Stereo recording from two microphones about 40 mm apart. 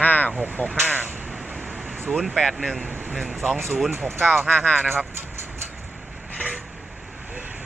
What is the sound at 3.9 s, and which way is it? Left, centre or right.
Speech, right.